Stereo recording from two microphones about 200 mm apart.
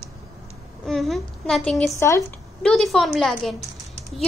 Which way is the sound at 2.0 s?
15° left (ahead or behind).